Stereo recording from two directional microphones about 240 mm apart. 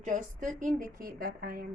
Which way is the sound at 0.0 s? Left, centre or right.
Right.